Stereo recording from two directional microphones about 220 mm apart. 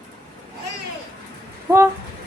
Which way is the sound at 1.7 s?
10° right (ahead or behind).